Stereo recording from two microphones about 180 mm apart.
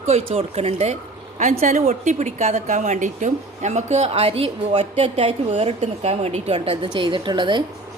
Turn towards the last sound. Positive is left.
turn(degrees=-25)  # may be behind; listen again after turning